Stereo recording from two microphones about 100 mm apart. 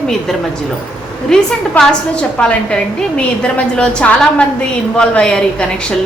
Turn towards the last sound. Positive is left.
turn(degrees=10)  # may be behind; listen again after turning